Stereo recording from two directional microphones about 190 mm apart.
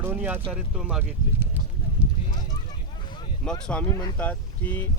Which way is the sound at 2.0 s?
5° right (ahead or behind).